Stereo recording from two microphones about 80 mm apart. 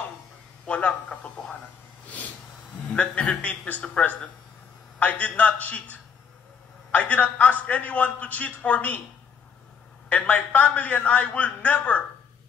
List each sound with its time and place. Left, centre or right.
0.7 s a sound: centre
2.9 s a man's voice: centre
10.0 s a man's voice: centre